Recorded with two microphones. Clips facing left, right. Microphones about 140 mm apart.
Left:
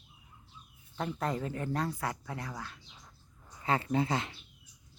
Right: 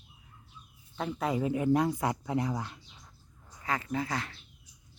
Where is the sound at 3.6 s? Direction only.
30° left (ahead or behind).